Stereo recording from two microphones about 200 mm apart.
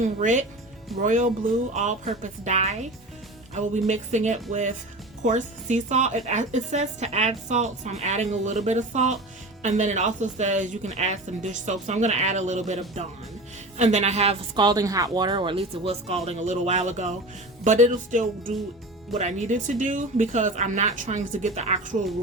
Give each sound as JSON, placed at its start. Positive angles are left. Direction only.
{"t": 0.2, "sound": "speech", "side_deg": -40}